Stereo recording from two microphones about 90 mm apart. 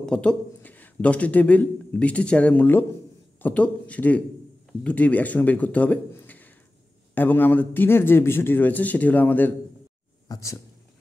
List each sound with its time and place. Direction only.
0.0 s a man's voice: 10° left (ahead or behind)
6.1 s a sound: 20° left (ahead or behind)
7.2 s a man's voice: 20° left (ahead or behind)
10.2 s speech: 40° left (ahead or behind)